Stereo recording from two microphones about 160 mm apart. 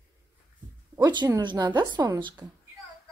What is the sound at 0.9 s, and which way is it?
A woman's voice, 25° right (ahead or behind).